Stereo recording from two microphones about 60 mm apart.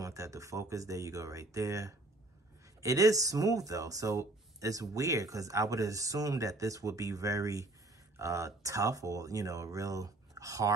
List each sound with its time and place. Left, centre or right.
0.0 s speech: right